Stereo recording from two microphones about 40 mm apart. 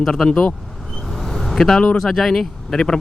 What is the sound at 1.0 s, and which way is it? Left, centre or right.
Vehicle, centre.